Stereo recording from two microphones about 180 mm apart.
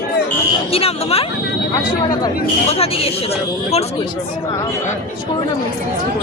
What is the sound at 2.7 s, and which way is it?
Speech, 35° left (ahead or behind).